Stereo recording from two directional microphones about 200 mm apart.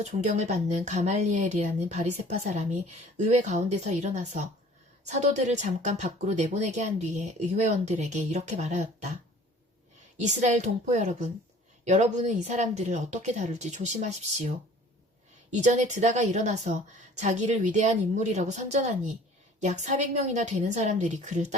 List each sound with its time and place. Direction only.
0.0 s speech: 35° right (ahead or behind)
10.2 s speech: 35° right (ahead or behind)
15.5 s speech: 35° right (ahead or behind)